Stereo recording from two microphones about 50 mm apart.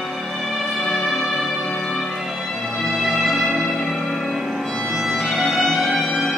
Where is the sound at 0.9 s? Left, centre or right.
Centre.